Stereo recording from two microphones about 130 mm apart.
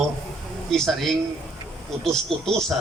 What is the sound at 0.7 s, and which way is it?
A man's voice, 5° left (ahead or behind).